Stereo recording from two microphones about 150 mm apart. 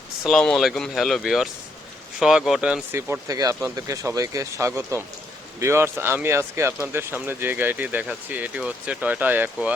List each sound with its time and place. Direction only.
0.3 s speech: centre (ahead or behind)
2.9 s speech: 20° right (ahead or behind)